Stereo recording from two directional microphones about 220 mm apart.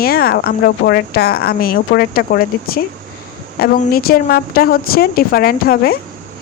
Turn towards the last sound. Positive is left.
turn(degrees=45)  # may be behind; listen again after turning